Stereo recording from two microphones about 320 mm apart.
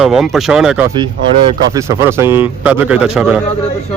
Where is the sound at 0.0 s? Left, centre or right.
Centre.